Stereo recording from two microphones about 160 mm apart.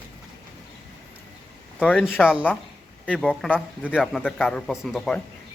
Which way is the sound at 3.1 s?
5° left (ahead or behind).